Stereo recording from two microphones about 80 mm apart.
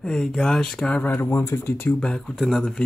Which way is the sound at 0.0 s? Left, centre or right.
Centre.